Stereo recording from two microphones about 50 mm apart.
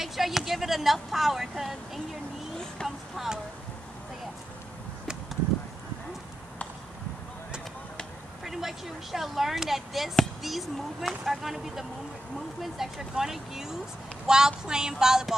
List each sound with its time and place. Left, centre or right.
0.0 s speech: centre
2.8 s speech: centre
8.5 s speech: centre
12.7 s a sound: centre